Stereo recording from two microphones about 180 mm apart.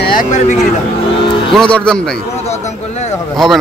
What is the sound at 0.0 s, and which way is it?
Speech, 45° left (ahead or behind).